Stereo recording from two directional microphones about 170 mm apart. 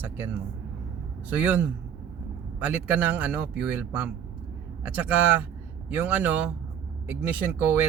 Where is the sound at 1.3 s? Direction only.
10° right (ahead or behind).